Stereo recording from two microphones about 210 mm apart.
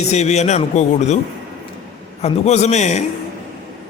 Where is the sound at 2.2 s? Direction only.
30° left (ahead or behind).